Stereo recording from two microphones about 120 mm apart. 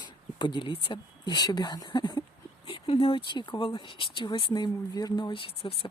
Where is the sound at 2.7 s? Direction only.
50° left (ahead or behind).